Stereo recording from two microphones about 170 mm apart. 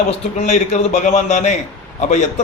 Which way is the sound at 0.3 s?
40° left (ahead or behind).